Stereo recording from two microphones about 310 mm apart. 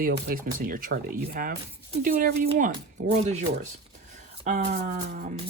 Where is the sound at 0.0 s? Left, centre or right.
Right.